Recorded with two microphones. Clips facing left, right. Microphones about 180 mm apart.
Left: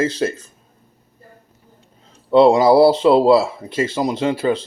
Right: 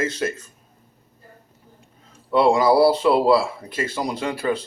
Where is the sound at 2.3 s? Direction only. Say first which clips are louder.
Left 5 dB; 25° left (ahead or behind).